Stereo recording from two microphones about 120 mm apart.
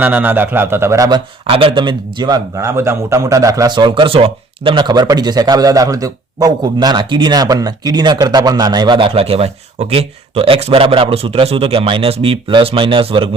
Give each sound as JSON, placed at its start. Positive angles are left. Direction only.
{"t": 0.0, "sound": "speech", "side_deg": -15}
{"t": 1.5, "sound": "speech", "side_deg": -50}